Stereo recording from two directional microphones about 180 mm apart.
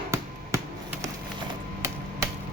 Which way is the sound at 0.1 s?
15° right (ahead or behind).